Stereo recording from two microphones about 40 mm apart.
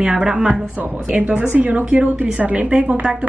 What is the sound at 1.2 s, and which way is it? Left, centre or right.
A woman's voice, right.